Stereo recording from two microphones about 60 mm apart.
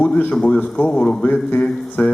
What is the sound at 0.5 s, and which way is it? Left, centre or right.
A man's voice, left.